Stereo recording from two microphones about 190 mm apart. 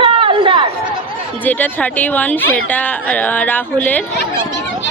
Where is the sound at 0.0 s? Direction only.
30° right (ahead or behind).